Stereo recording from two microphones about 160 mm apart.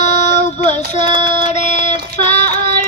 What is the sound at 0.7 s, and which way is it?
Child singing, 45° left (ahead or behind).